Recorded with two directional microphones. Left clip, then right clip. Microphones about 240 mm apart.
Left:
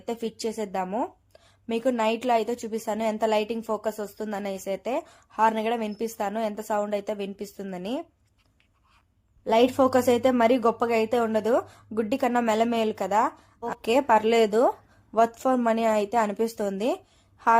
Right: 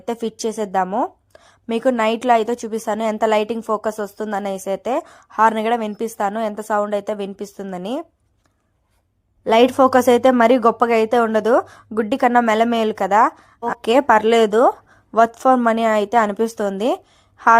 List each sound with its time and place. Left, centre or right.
0.0 s speech: right
9.4 s speech: right